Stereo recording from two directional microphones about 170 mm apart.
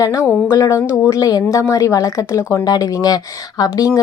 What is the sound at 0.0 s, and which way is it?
A woman's voice, 20° left (ahead or behind).